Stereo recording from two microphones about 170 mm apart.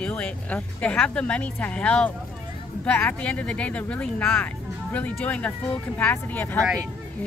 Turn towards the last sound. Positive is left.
turn(degrees=10)  # may be behind; listen again after turning